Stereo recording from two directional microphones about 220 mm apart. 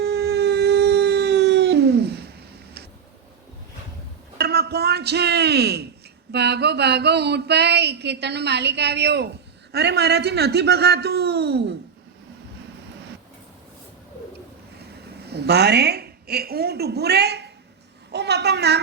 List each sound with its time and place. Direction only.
0.0 s howl: 50° right (ahead or behind)
4.4 s a sound: 45° right (ahead or behind)
15.3 s a woman's voice: 50° right (ahead or behind)